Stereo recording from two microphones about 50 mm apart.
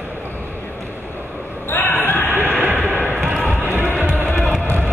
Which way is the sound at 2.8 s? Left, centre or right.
Left.